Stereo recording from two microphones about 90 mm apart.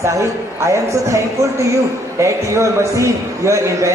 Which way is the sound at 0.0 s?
35° right (ahead or behind).